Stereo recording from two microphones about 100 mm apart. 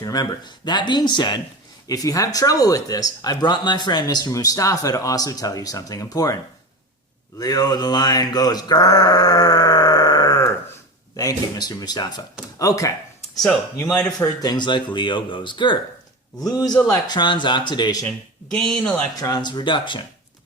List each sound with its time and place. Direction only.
0.0 s speech: 40° left (ahead or behind)
1.9 s a man's voice: 35° left (ahead or behind)
7.3 s mantra: 45° left (ahead or behind)
11.2 s a man's voice: 40° left (ahead or behind)
13.9 s speech: 10° left (ahead or behind)
14.4 s speech: 50° left (ahead or behind)
16.5 s a man's voice: 40° left (ahead or behind)
18.0 s speech: 5° left (ahead or behind)
19.1 s speech: 40° left (ahead or behind)